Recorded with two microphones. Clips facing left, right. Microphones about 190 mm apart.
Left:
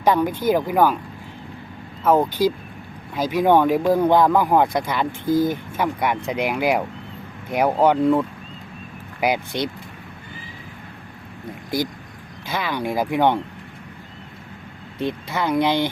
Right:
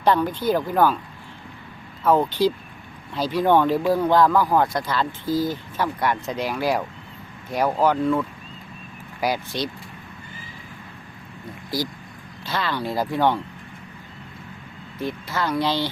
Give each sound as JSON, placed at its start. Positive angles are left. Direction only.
{"t": 0.0, "sound": "speech", "side_deg": 10}
{"t": 3.2, "sound": "speech", "side_deg": 15}
{"t": 5.2, "sound": "speech", "side_deg": 50}
{"t": 5.7, "sound": "speech", "side_deg": 15}
{"t": 9.2, "sound": "speech", "side_deg": 20}
{"t": 12.5, "sound": "speech", "side_deg": 10}
{"t": 14.9, "sound": "speech", "side_deg": 20}